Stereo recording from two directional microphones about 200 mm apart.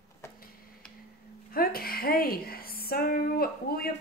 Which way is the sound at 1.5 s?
50° left (ahead or behind).